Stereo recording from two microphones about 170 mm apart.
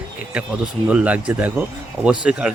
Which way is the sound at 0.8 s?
5° right (ahead or behind).